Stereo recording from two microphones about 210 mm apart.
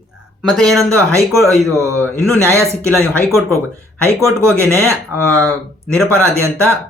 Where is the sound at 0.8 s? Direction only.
15° right (ahead or behind).